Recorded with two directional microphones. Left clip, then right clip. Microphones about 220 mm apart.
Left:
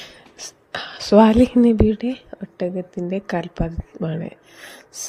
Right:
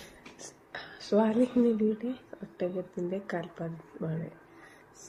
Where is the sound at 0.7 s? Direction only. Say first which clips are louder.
Left 13 dB; 45° left (ahead or behind).